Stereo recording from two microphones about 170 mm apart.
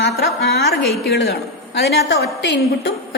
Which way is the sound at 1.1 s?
75° left (ahead or behind).